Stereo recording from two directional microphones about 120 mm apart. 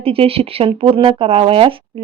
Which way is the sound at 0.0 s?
50° right (ahead or behind).